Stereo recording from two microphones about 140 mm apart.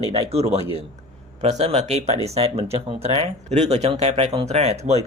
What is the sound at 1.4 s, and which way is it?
Speech, 50° right (ahead or behind).